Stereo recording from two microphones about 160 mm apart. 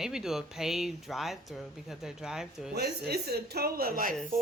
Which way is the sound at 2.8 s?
85° right.